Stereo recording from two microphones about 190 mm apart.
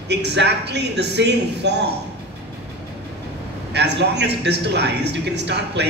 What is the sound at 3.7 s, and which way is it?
A man's voice, 65° right (ahead or behind).